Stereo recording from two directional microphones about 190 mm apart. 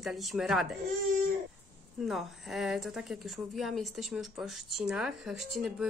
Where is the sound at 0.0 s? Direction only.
Centre (ahead or behind).